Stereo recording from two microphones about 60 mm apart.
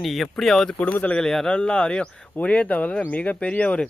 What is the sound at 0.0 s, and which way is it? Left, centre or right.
Speech, centre.